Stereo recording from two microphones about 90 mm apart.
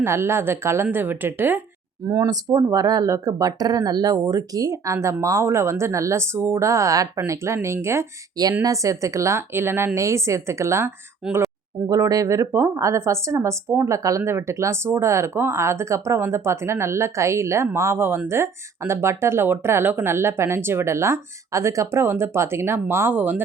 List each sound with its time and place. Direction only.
0.0 s speech: 30° right (ahead or behind)
2.0 s speech: 40° right (ahead or behind)
11.9 s speech: 40° right (ahead or behind); by 23.4 s 20° right (ahead or behind)